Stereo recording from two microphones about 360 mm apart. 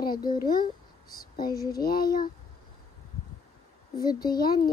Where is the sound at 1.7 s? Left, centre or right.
Left.